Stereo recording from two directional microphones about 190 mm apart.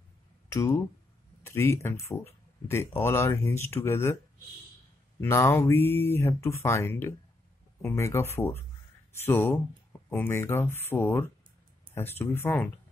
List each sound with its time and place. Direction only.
0.5 s speech: 15° left (ahead or behind)
5.2 s speech: 15° left (ahead or behind)